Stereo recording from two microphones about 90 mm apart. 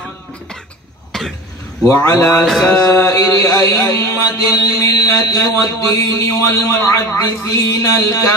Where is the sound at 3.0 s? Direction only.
35° left (ahead or behind).